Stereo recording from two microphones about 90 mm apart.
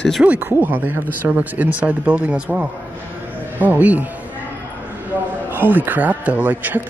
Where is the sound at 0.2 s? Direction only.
15° right (ahead or behind).